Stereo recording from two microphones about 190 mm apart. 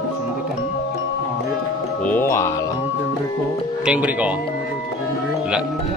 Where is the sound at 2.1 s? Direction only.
10° left (ahead or behind).